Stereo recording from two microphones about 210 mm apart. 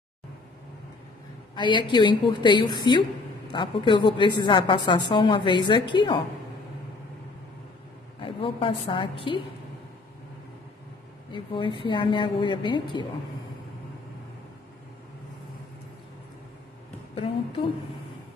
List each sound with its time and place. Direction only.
1.5 s a woman's voice: 20° left (ahead or behind)
8.2 s a woman's voice: 25° left (ahead or behind)
11.3 s a woman's voice: 25° left (ahead or behind)